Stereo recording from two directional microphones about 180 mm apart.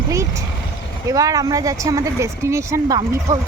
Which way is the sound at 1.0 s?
20° right (ahead or behind).